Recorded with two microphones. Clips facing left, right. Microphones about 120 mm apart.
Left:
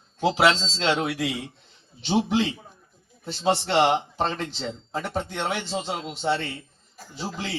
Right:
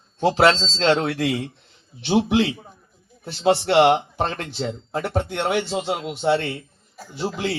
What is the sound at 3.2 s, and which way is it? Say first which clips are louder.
Speech: right 4 dB; 55° right (ahead or behind).